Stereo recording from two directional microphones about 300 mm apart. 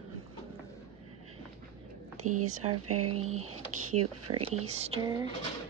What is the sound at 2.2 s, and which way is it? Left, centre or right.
Speech, right.